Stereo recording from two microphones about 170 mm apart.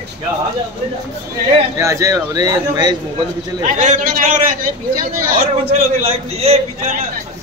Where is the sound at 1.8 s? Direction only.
20° right (ahead or behind).